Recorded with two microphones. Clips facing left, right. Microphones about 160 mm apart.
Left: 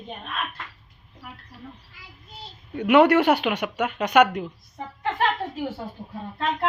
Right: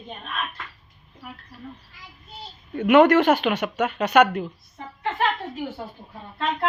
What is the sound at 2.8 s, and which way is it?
Speech, 10° left (ahead or behind).